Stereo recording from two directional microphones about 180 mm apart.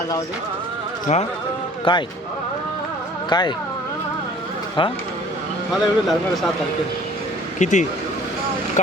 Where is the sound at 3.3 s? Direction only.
25° left (ahead or behind).